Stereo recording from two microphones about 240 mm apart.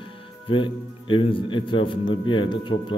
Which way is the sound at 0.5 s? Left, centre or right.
Left.